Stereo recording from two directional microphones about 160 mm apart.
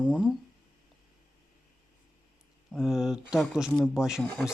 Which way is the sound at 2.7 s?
Centre (ahead or behind).